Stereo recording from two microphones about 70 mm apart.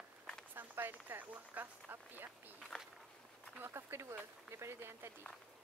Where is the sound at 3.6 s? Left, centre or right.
Right.